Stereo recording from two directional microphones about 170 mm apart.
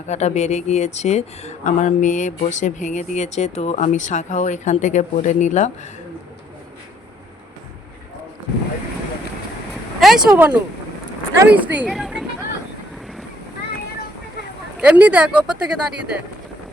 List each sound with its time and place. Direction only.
0.1 s speech: 40° left (ahead or behind)
10.0 s a sound: centre (ahead or behind)
10.3 s speech: 10° right (ahead or behind)
14.8 s speech: 5° right (ahead or behind)